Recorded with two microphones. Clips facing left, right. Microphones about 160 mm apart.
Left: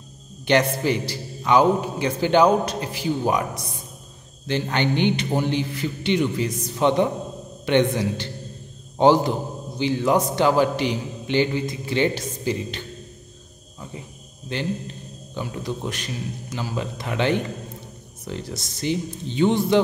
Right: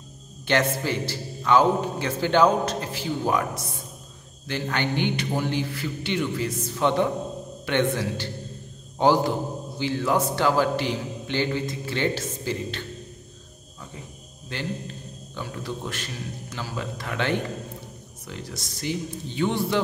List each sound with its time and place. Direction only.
0.5 s a man's voice: 15° left (ahead or behind)
14.5 s a man's voice: 20° left (ahead or behind)